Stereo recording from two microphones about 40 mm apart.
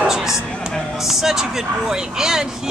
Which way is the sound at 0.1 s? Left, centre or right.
Centre.